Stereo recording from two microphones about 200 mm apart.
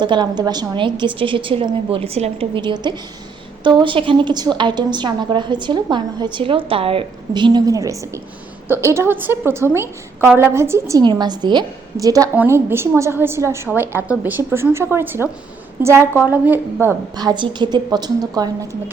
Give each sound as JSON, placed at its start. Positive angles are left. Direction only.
{"t": 0.0, "sound": "a woman's voice", "side_deg": -20}
{"t": 17.2, "sound": "a woman's voice", "side_deg": -20}